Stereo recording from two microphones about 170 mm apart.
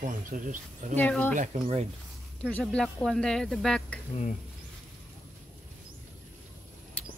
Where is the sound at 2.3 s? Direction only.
5° left (ahead or behind).